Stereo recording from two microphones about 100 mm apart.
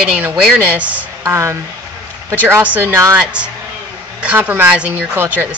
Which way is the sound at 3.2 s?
10° right (ahead or behind).